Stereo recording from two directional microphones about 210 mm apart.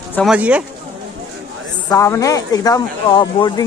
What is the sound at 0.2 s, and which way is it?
Speech, 5° right (ahead or behind).